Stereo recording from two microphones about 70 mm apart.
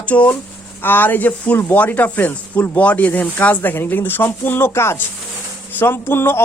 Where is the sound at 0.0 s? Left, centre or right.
Centre.